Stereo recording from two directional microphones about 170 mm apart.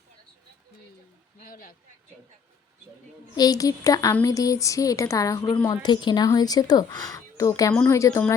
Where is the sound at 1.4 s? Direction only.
60° left (ahead or behind).